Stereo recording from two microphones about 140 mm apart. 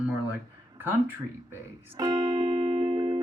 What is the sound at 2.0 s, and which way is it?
Music, 25° right (ahead or behind).